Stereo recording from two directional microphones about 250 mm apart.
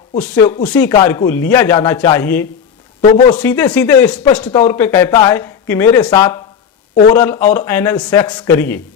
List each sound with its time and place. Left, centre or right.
0.2 s speech: centre
3.0 s speech: left
3.3 s speech: centre